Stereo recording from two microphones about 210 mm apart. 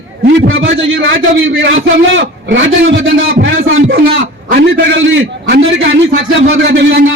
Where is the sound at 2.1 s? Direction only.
60° right (ahead or behind).